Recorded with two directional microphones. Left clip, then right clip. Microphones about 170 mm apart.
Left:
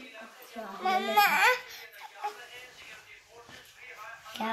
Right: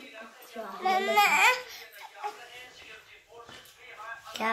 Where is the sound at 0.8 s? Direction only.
40° left (ahead or behind).